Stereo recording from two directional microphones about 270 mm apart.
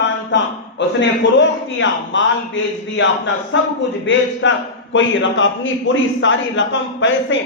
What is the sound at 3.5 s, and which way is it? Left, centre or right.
A man's voice, left.